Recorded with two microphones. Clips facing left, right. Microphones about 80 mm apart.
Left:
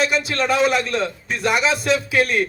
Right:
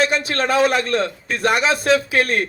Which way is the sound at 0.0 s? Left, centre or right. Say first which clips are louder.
Right 1 dB; right.